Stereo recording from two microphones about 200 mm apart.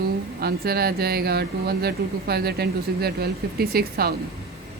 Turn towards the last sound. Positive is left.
turn(degrees=-50)  # may be behind; listen again after turning